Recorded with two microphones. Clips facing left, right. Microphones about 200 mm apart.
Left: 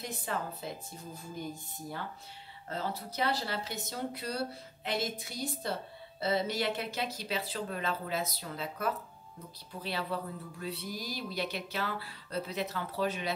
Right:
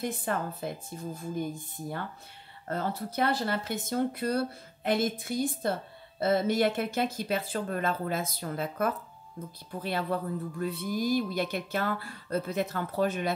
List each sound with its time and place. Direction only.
0.0 s a woman's voice: 55° right (ahead or behind)